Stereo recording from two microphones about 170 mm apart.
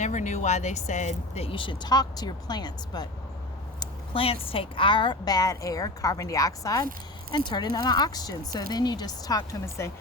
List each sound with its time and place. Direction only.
0.0 s a woman's voice: 45° left (ahead or behind); by 9.9 s 20° left (ahead or behind)